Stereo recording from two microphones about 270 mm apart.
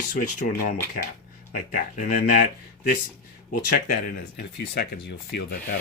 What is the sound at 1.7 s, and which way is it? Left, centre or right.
Speech, left.